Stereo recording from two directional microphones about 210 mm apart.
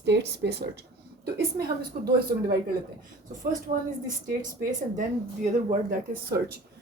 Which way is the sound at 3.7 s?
30° right (ahead or behind).